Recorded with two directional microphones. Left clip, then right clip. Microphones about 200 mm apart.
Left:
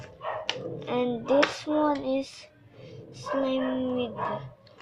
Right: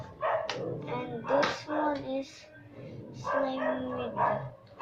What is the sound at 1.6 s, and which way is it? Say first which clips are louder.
Hands: left 5 dB; 50° left (ahead or behind).